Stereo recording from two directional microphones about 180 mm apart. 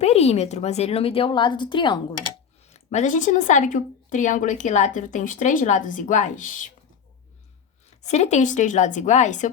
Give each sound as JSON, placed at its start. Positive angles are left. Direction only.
{"t": 0.0, "sound": "speech", "side_deg": 35}
{"t": 2.6, "sound": "a woman's voice", "side_deg": 35}
{"t": 8.0, "sound": "speech", "side_deg": 40}